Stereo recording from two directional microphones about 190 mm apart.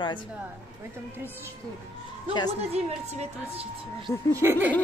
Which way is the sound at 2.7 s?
35° right (ahead or behind).